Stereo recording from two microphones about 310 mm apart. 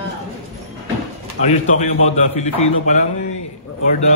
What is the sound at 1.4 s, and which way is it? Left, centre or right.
A man's voice, left.